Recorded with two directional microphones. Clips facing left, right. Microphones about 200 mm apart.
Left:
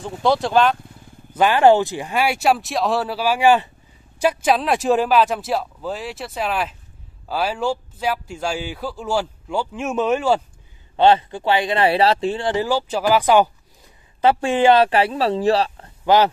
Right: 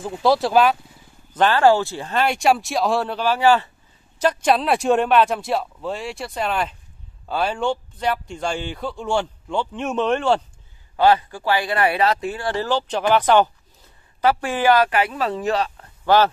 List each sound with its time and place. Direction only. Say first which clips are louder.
0.0 s speech: right 1 dB; centre (ahead or behind)
1.3 s speech: left 2 dB; 10° left (ahead or behind)
11.0 s speech: left 2 dB; 25° left (ahead or behind)
12.6 s speech: left 1 dB; 5° left (ahead or behind)
14.2 s speech: left 3 dB; 25° left (ahead or behind)